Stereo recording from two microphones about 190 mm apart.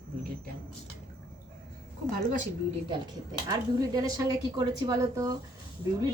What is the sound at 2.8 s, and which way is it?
Speech, 20° right (ahead or behind).